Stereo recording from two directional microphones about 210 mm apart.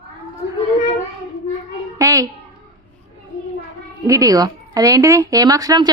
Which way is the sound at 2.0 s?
15° right (ahead or behind).